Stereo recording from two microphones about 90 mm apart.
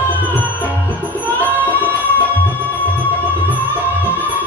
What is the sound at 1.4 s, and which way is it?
Music, 20° left (ahead or behind).